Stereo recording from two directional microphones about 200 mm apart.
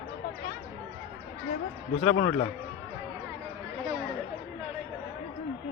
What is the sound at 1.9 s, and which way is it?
Speech, 35° left (ahead or behind).